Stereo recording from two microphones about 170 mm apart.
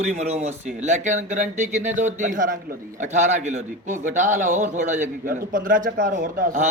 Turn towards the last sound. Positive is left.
turn(degrees=-50)  # may be behind; listen again after turning